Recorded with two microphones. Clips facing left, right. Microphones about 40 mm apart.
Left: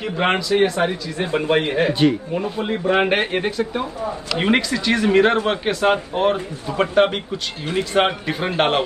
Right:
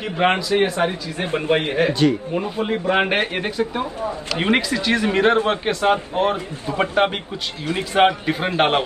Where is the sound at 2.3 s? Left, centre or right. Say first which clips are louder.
Right 1 dB; centre.